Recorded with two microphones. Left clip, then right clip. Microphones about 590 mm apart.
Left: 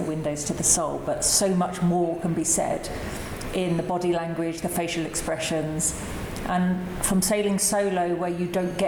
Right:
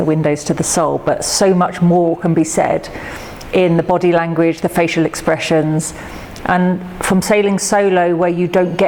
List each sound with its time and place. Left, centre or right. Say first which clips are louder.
0.1 s speech: right 13 dB; right
7.0 s speech: right 11 dB; right